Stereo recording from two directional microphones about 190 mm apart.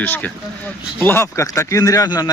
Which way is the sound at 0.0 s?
10° left (ahead or behind).